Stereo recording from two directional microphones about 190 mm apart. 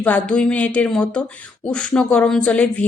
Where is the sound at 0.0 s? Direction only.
5° left (ahead or behind).